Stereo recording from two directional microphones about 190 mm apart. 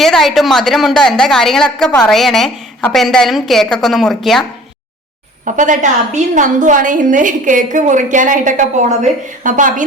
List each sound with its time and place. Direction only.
0.0 s a woman's voice: centre (ahead or behind)
5.5 s a woman's voice: 40° right (ahead or behind)